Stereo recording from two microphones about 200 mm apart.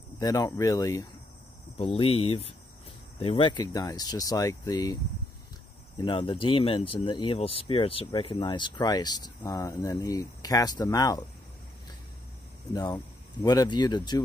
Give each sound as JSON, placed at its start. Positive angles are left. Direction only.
{"t": 0.2, "sound": "speech", "side_deg": 20}
{"t": 5.9, "sound": "speech", "side_deg": 25}
{"t": 12.7, "sound": "speech", "side_deg": 20}